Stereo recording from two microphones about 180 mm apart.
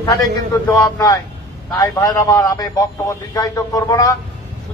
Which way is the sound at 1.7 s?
20° left (ahead or behind).